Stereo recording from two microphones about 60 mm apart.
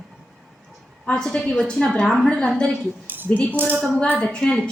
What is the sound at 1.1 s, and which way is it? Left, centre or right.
Speech, centre.